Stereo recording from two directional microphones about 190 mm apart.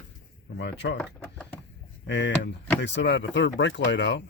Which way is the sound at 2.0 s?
70° left (ahead or behind).